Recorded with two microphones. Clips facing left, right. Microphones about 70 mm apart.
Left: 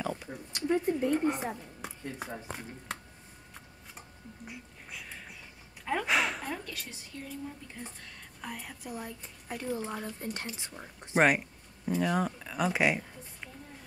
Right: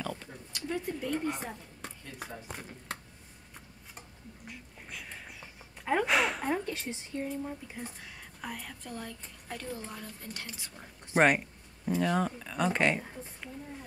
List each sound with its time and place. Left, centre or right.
0.0 s a sound: centre
0.6 s speech: left
1.4 s a woman's voice: centre
2.0 s speech: centre
5.0 s a sound: centre
6.0 s speech: centre
6.4 s speech: right
7.6 s speech: centre; by 11.1 s left
11.1 s speech: centre